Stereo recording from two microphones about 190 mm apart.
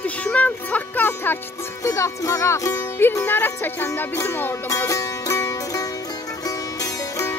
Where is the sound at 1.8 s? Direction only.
15° left (ahead or behind).